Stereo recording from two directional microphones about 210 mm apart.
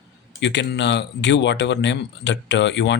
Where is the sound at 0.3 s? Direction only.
55° left (ahead or behind).